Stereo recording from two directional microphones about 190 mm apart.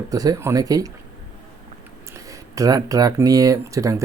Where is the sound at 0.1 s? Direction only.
20° right (ahead or behind).